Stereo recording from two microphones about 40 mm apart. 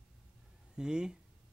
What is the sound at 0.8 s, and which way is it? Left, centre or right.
Speech, centre.